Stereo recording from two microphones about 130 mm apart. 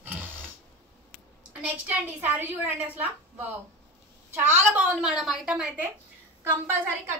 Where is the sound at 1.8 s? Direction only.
15° right (ahead or behind).